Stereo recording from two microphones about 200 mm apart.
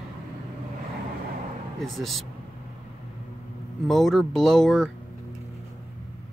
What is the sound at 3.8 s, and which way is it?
Speech, centre (ahead or behind).